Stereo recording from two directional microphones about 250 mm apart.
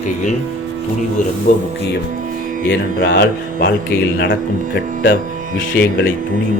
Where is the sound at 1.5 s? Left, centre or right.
Left.